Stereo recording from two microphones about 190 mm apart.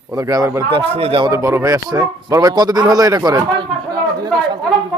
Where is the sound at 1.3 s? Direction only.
15° right (ahead or behind).